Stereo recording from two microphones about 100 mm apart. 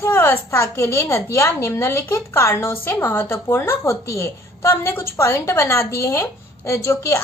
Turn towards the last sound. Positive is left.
turn(degrees=30)  # may be behind; listen again after turning